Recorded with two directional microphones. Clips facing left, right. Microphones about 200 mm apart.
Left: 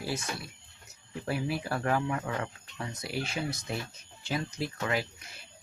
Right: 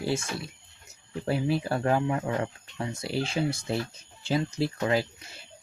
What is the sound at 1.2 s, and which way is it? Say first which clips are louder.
Speech: right 5 dB; 25° right (ahead or behind).